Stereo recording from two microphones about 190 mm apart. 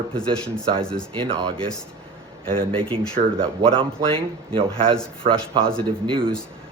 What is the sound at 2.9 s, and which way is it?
Speech, 25° right (ahead or behind).